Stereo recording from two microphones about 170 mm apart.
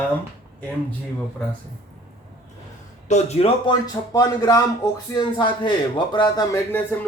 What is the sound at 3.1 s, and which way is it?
A man's voice, 40° left (ahead or behind).